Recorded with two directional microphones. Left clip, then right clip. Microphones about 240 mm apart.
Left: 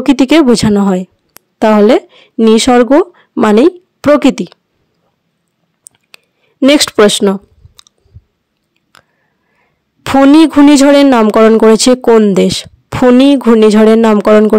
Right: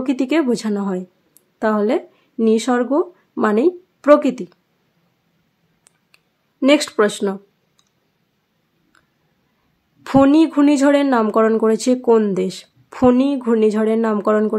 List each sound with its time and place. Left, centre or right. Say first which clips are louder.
0.0 s speech: left 11 dB; left
6.1 s clicking: left 10 dB; left
8.9 s chewing: left 14 dB; left
10.0 s speech: left 8 dB; left